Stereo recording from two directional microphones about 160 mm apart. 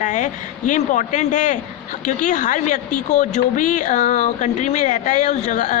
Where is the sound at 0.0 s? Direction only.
50° left (ahead or behind).